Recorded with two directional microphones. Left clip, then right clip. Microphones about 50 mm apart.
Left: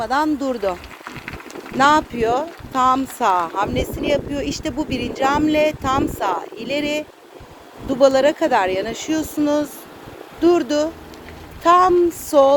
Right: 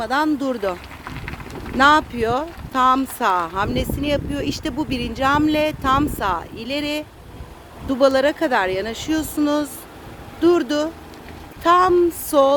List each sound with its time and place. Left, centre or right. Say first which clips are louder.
0.0 s speech: left 1 dB; right
0.3 s speech: left 1 dB; right
1.0 s a sound: right 1 dB; left
1.8 s speech: even; right